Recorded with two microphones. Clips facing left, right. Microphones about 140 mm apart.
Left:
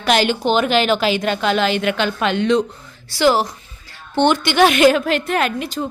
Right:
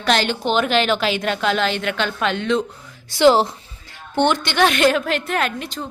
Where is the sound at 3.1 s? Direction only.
25° right (ahead or behind).